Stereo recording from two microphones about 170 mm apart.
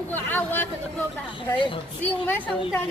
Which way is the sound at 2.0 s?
10° left (ahead or behind).